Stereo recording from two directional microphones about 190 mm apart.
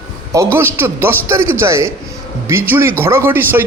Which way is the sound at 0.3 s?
15° right (ahead or behind).